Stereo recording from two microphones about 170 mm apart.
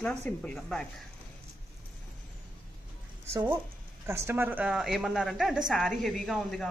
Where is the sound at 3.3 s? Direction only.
15° right (ahead or behind).